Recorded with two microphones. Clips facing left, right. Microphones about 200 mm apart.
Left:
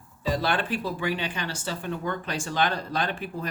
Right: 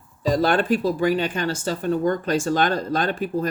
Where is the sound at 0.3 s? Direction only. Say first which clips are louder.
Right 7 dB; 45° right (ahead or behind).